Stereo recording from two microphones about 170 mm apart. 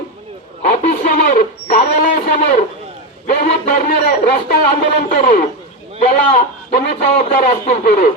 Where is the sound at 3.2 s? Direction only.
50° left (ahead or behind).